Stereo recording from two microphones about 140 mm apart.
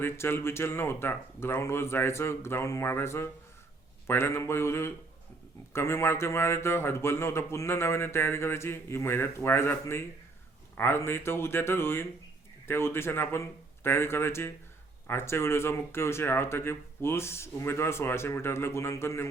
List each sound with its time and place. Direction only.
0.0 s speech: 15° left (ahead or behind)